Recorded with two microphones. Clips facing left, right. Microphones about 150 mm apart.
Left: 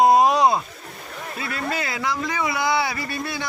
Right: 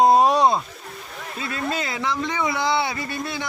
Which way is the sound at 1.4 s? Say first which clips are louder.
Right 1 dB; 20° right (ahead or behind).